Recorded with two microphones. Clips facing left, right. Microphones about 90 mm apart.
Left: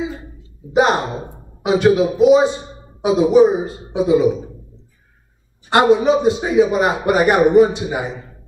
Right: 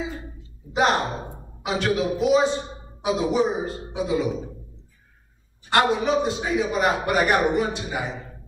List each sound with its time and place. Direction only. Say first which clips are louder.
0.7 s a man's voice: left 6 dB; 20° left (ahead or behind)
5.7 s a man's voice: left 7 dB; 20° left (ahead or behind)